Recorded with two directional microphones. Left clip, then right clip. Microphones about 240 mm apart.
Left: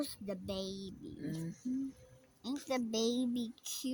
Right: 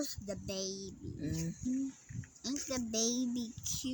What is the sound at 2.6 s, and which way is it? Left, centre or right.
A child's voice, left.